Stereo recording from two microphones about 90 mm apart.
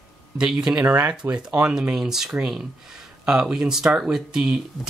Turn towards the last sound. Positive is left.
turn(degrees=-5)  # may be behind; listen again after turning